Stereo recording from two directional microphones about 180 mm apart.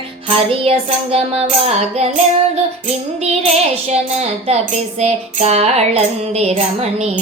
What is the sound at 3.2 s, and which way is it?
Music, 35° right (ahead or behind).